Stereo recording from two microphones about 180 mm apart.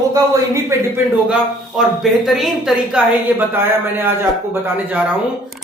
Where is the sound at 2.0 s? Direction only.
Centre (ahead or behind).